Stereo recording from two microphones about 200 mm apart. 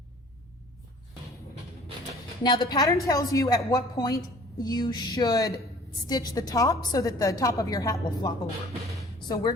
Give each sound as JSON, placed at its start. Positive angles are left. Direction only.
{"t": 2.4, "sound": "a woman's voice", "side_deg": 20}
{"t": 9.3, "sound": "a woman's voice", "side_deg": 20}